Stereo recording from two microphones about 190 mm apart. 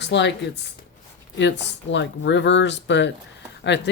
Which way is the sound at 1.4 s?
70° left (ahead or behind).